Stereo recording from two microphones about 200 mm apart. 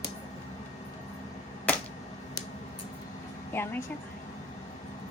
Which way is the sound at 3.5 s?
10° left (ahead or behind).